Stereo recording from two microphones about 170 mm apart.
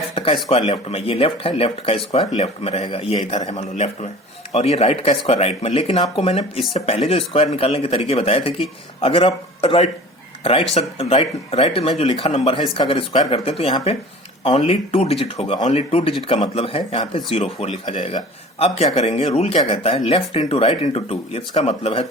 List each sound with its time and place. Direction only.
0.5 s speech: 35° left (ahead or behind)